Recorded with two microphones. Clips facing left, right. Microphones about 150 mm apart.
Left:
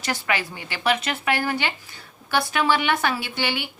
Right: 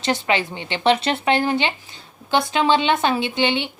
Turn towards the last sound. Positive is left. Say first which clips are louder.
# right 7 dB
turn(degrees=-20)  # may be behind; listen again after turning